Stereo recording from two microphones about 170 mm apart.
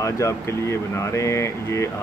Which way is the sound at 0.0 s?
20° left (ahead or behind).